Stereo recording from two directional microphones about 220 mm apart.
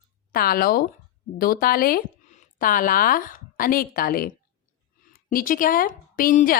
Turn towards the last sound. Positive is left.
turn(degrees=40)  # may be behind; listen again after turning